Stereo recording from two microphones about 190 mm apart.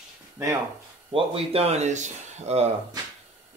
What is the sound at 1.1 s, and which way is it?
Speech, 30° right (ahead or behind).